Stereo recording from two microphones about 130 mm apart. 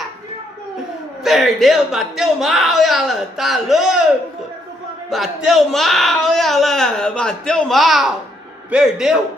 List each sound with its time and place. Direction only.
1.2 s speech: centre (ahead or behind)
5.1 s speech: centre (ahead or behind)